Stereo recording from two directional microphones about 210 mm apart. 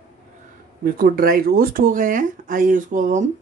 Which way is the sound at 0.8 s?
45° right (ahead or behind).